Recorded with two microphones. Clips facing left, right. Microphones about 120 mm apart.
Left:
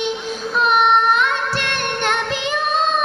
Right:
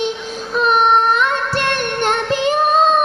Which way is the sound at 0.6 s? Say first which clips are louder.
Right 2 dB; 40° right (ahead or behind).